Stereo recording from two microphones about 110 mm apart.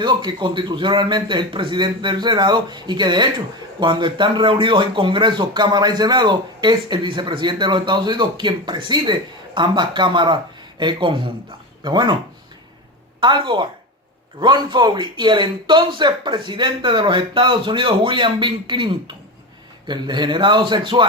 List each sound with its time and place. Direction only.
0.0 s a man's voice: 45° right (ahead or behind)
13.1 s a man's voice: 50° right (ahead or behind)